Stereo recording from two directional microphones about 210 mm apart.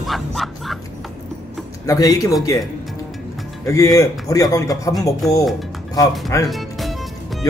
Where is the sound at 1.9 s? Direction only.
15° left (ahead or behind).